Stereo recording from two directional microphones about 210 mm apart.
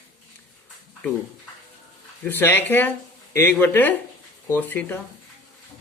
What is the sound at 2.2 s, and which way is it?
Speech, 10° left (ahead or behind).